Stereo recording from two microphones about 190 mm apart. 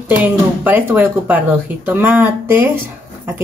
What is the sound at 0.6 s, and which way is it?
Speech, 10° right (ahead or behind).